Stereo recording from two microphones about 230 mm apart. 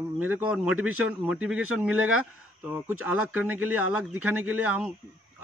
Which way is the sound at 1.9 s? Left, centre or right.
Right.